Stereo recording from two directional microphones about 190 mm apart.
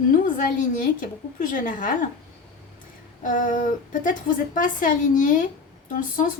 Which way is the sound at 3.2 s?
45° left (ahead or behind).